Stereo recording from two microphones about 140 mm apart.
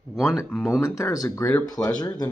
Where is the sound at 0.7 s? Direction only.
20° left (ahead or behind).